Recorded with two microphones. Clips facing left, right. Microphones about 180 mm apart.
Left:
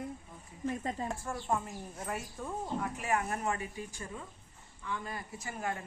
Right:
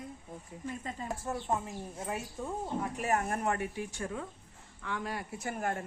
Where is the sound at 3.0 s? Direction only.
40° right (ahead or behind).